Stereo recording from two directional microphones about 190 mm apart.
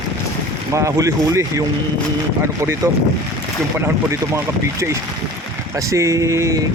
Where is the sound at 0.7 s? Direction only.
15° right (ahead or behind).